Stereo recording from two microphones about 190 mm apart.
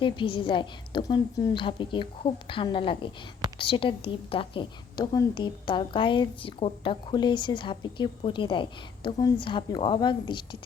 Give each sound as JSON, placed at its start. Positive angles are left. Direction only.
{"t": 0.0, "sound": "a woman's voice", "side_deg": 25}